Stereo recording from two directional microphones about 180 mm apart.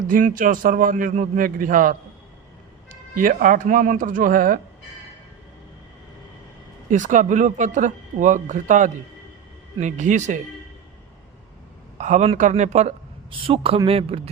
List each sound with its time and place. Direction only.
0.1 s speech: 45° right (ahead or behind)
6.9 s a man's voice: 45° right (ahead or behind)
11.9 s a man's voice: 40° right (ahead or behind)